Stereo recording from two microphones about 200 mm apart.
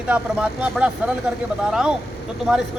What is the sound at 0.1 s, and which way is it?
Speech, 5° right (ahead or behind).